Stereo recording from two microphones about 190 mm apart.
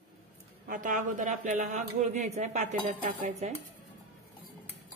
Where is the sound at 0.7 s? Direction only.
45° right (ahead or behind).